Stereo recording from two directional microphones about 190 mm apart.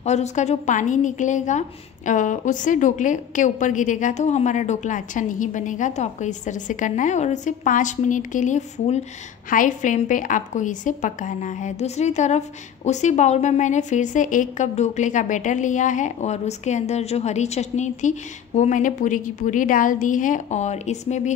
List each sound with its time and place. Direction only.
0.0 s a woman's voice: 35° left (ahead or behind)